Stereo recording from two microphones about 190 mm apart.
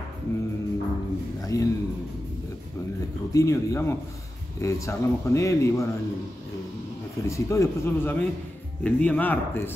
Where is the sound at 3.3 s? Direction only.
15° left (ahead or behind).